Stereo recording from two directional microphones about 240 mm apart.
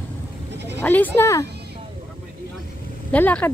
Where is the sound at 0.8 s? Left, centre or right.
Centre.